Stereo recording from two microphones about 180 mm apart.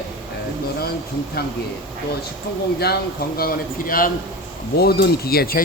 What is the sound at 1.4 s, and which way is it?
Speech, 60° left (ahead or behind).